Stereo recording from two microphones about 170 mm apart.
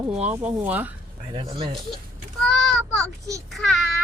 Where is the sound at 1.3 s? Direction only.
30° right (ahead or behind).